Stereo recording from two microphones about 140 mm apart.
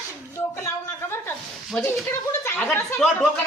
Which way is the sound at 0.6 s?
15° left (ahead or behind).